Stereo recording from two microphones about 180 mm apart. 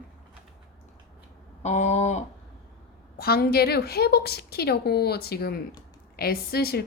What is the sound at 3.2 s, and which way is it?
A woman's voice, 60° left (ahead or behind).